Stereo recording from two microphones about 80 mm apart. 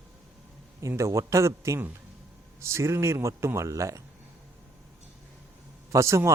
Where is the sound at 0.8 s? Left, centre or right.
Right.